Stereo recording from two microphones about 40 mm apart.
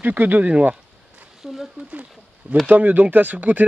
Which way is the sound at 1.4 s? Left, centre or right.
Centre.